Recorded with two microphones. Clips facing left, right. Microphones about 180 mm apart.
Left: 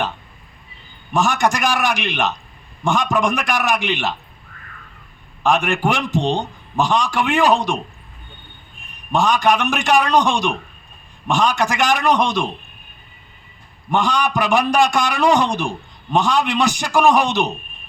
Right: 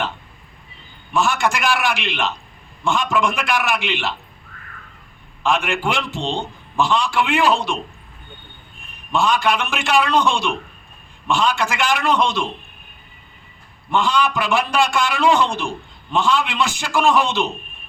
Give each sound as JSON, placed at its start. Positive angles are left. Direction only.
{"t": 1.1, "sound": "a man's voice", "side_deg": 40}
{"t": 5.4, "sound": "a man's voice", "side_deg": 40}
{"t": 9.1, "sound": "a man's voice", "side_deg": 40}
{"t": 13.9, "sound": "a man's voice", "side_deg": 40}